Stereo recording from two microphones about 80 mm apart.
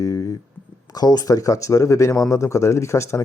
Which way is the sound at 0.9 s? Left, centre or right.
Left.